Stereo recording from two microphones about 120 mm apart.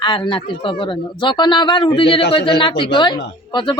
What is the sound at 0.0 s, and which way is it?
A man's voice, 40° left (ahead or behind).